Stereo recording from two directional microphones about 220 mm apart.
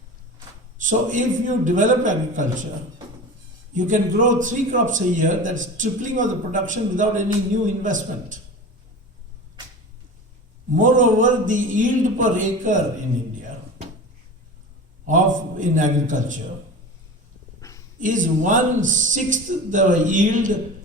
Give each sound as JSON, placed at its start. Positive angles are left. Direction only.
{"t": 0.8, "sound": "a man's voice", "side_deg": -35}
{"t": 3.8, "sound": "a man's voice", "side_deg": -35}
{"t": 10.8, "sound": "a man's voice", "side_deg": -35}
{"t": 15.0, "sound": "a man's voice", "side_deg": -35}
{"t": 17.6, "sound": "dog", "side_deg": 15}
{"t": 18.0, "sound": "a man's voice", "side_deg": -35}